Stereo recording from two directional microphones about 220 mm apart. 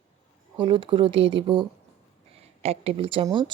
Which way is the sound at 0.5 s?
20° right (ahead or behind).